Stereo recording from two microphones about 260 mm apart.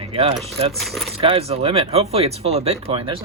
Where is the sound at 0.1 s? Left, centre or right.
Right.